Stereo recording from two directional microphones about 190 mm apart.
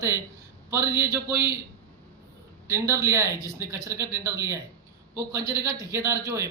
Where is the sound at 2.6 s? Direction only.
15° right (ahead or behind).